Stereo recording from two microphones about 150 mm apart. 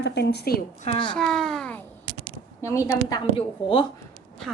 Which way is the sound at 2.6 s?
20° left (ahead or behind).